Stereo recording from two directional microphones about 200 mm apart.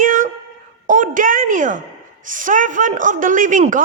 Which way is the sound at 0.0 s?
40° right (ahead or behind).